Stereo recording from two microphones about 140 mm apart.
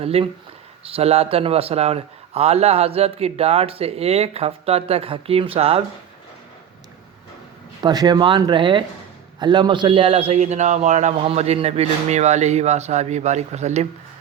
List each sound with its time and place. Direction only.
0.0 s a man's voice: 45° right (ahead or behind)
7.8 s a man's voice: 30° right (ahead or behind); by 13.8 s 55° right (ahead or behind)